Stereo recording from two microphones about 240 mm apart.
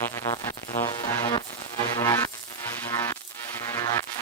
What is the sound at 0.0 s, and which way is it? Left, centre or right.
Music, centre.